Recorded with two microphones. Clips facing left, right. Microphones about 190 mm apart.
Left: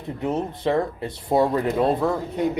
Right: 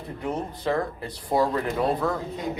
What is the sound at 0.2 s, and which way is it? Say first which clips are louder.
Speech: left 5 dB; 25° left (ahead or behind).